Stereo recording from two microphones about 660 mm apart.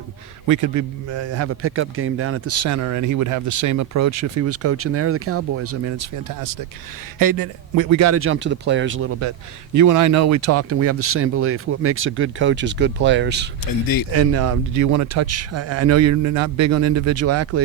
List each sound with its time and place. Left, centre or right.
0.4 s a man's voice: right
13.7 s speech: left
14.1 s a man's voice: right